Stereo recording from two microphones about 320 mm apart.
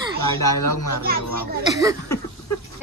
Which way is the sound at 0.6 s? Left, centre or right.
Left.